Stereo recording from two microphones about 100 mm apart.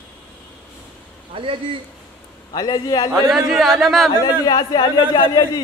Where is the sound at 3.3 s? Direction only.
Centre (ahead or behind).